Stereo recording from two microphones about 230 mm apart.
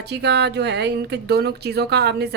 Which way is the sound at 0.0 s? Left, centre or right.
Right.